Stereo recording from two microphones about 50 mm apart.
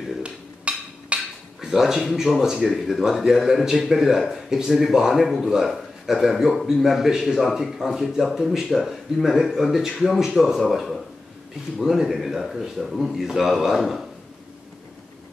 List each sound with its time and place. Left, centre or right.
0.2 s dishes: right
1.7 s a man's voice: centre
2.6 s speech: centre